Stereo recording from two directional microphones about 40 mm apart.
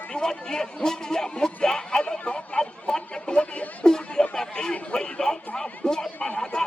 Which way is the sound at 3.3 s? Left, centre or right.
Left.